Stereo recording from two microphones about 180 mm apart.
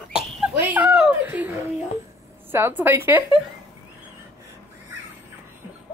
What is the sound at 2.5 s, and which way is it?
Speech, 10° right (ahead or behind).